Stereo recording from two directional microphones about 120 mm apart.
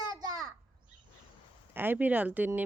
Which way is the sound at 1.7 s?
15° right (ahead or behind).